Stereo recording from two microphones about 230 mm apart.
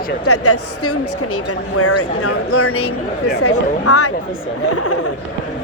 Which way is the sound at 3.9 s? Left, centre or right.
Left.